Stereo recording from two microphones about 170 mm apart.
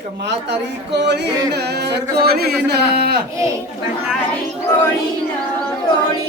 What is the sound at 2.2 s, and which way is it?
Speech, 65° right (ahead or behind).